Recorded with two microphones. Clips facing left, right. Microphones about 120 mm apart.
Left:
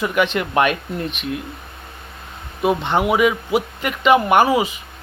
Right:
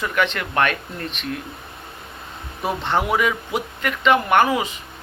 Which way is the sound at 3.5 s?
15° left (ahead or behind).